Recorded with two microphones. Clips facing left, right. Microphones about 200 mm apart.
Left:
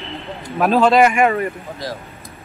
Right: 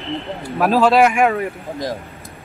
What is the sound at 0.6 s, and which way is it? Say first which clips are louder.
Speech: even; centre (ahead or behind).